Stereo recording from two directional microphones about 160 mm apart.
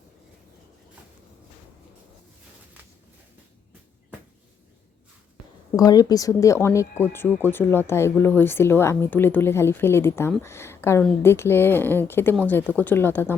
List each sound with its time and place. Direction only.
5.7 s speech: 25° left (ahead or behind)